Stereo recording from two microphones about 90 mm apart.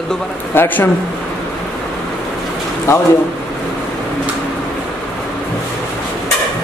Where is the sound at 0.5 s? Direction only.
20° left (ahead or behind).